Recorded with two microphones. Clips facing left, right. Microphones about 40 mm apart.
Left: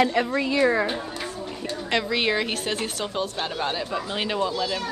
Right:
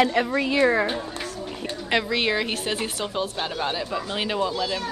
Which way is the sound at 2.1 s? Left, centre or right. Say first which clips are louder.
Even; centre.